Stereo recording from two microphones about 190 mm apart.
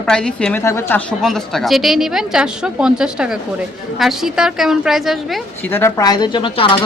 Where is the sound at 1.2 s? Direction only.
Centre (ahead or behind).